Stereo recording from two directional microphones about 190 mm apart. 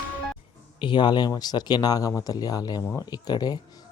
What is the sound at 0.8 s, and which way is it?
Speech, 25° left (ahead or behind).